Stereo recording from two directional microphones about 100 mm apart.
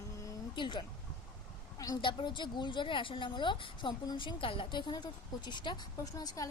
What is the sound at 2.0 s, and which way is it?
A woman's voice, 50° left (ahead or behind).